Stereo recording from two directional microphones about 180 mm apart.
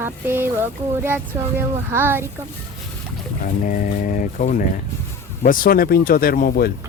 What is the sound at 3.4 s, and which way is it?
Speech, 50° left (ahead or behind).